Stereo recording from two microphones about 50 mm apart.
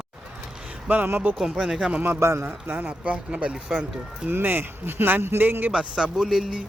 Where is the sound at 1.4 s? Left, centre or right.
Centre.